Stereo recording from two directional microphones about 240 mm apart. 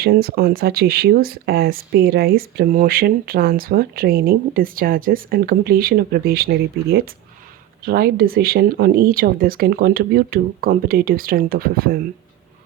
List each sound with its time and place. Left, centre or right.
0.0 s speech: right